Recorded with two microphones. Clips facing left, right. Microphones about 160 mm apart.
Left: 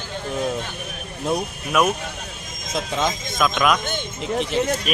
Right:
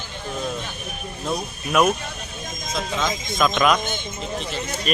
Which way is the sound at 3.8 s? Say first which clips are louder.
Left 3 dB; 65° left (ahead or behind).